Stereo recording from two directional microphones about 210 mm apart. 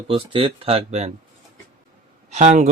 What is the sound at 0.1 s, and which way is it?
Speech, 25° right (ahead or behind).